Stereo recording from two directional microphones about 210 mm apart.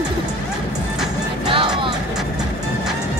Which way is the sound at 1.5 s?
25° right (ahead or behind).